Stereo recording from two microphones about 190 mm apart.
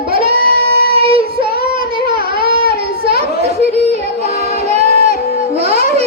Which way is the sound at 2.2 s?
25° right (ahead or behind).